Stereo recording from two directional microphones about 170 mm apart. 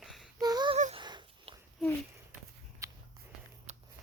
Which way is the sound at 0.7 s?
35° right (ahead or behind).